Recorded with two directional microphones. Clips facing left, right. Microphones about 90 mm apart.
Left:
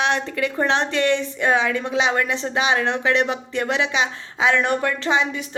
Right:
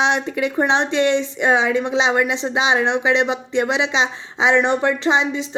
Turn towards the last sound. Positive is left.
turn(degrees=-20)  # may be behind; listen again after turning